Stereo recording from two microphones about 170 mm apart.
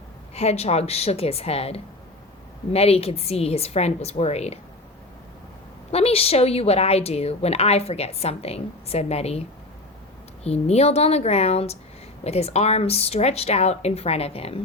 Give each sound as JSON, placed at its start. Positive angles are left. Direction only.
{"t": 0.3, "sound": "a woman's voice", "side_deg": 40}
{"t": 5.9, "sound": "a woman's voice", "side_deg": 35}
{"t": 10.4, "sound": "a woman's voice", "side_deg": 40}